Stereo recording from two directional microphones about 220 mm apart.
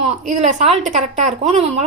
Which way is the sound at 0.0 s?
30° right (ahead or behind).